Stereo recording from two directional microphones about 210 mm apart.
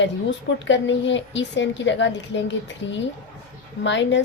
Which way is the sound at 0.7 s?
60° left (ahead or behind).